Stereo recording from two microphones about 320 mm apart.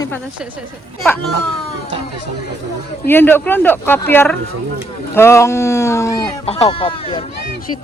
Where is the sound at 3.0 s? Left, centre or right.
Centre.